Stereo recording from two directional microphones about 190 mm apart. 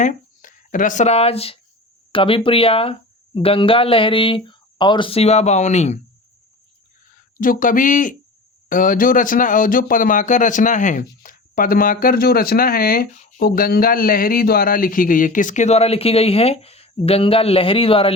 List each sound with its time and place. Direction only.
0.0 s speech: 45° left (ahead or behind)
7.3 s a man's voice: 45° left (ahead or behind); by 18.1 s 30° left (ahead or behind)